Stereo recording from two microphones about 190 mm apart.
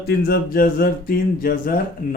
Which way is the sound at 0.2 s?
50° left (ahead or behind).